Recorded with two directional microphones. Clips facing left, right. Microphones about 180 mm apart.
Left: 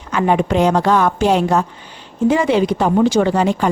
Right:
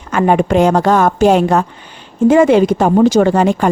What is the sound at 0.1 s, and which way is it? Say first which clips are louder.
A woman's voice: right 4 dB; 50° right (ahead or behind).